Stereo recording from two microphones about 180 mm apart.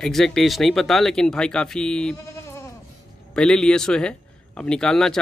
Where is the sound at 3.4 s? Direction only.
5° left (ahead or behind).